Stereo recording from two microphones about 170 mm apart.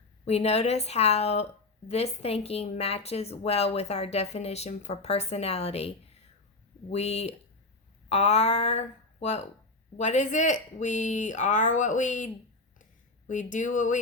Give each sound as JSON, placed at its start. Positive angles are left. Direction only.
{"t": 0.3, "sound": "a woman's voice", "side_deg": 40}
{"t": 6.9, "sound": "a woman's voice", "side_deg": 40}
{"t": 12.8, "sound": "a sound", "side_deg": 50}